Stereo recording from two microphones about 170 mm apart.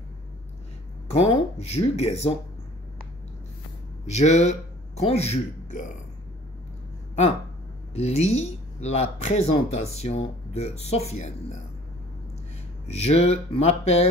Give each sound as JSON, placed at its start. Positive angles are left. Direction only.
{"t": 1.0, "sound": "speech", "side_deg": 35}
{"t": 4.1, "sound": "a man's voice", "side_deg": 40}
{"t": 7.9, "sound": "speech", "side_deg": 40}
{"t": 12.8, "sound": "speech", "side_deg": 35}